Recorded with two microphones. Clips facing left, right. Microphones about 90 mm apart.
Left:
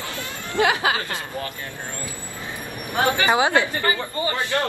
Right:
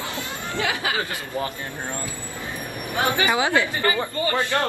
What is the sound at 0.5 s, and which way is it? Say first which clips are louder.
Speech: left 5 dB; 25° left (ahead or behind).